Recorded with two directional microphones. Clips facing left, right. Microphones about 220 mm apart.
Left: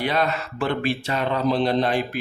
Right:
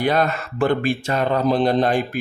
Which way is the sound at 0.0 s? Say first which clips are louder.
Right 4 dB; 45° right (ahead or behind).